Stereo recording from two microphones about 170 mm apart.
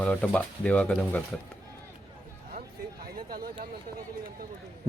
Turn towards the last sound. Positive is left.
turn(degrees=-60)  # may be behind; listen again after turning